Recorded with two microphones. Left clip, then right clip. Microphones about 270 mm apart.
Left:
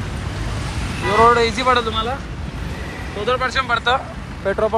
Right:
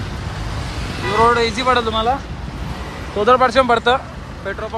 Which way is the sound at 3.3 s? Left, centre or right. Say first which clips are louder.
Right 6 dB; right.